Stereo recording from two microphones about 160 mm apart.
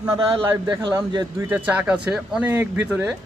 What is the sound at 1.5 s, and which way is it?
Speech, 10° right (ahead or behind).